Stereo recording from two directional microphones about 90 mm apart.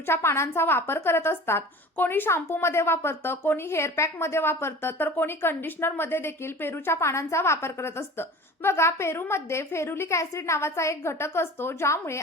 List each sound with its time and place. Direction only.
0.0 s a woman's voice: 25° left (ahead or behind)